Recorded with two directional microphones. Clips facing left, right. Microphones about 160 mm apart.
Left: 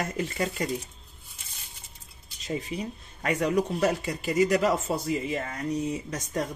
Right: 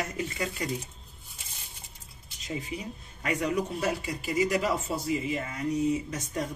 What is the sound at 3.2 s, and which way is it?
Speech, 45° left (ahead or behind).